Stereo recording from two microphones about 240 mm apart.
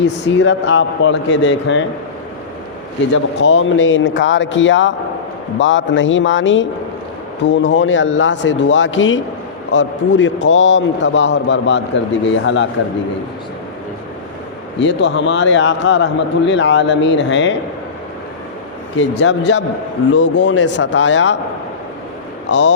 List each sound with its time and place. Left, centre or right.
0.0 s a man's voice: left
3.1 s a man's voice: left
14.8 s a man's voice: left
18.9 s a man's voice: left
22.4 s speech: left